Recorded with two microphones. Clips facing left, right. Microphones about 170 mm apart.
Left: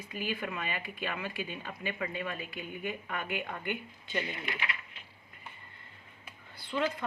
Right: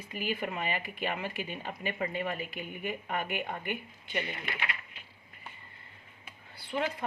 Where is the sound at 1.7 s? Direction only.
40° right (ahead or behind).